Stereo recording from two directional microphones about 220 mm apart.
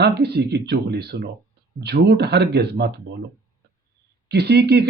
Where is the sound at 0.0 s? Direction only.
45° right (ahead or behind).